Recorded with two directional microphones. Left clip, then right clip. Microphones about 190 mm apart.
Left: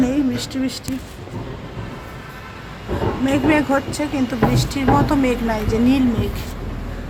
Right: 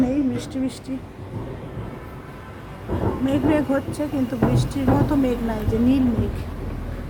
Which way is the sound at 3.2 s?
30° left (ahead or behind).